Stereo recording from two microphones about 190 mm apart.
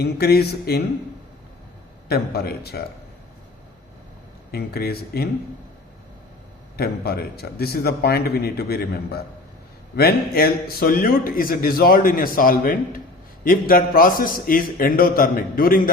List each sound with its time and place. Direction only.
0.0 s a man's voice: 55° left (ahead or behind)
2.0 s a man's voice: 55° left (ahead or behind)
4.5 s a man's voice: 55° left (ahead or behind)
6.7 s a man's voice: 55° left (ahead or behind)